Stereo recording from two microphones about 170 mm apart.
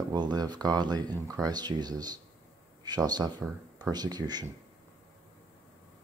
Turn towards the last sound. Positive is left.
turn(degrees=-25)  # may be behind; listen again after turning